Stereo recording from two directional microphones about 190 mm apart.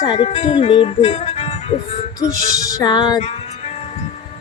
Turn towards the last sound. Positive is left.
turn(degrees=25)  # may be behind; listen again after turning